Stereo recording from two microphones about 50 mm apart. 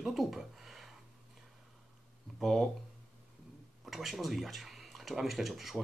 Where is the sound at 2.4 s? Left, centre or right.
Centre.